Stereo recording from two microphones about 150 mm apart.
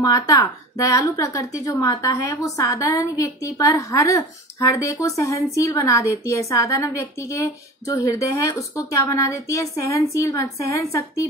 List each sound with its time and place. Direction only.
0.0 s a woman's voice: 25° left (ahead or behind)